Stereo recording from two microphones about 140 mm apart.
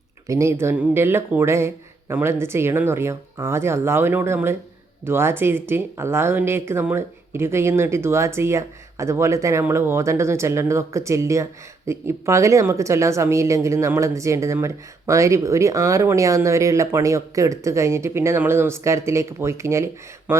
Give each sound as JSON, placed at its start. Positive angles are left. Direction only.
{"t": 0.3, "sound": "speech", "side_deg": -20}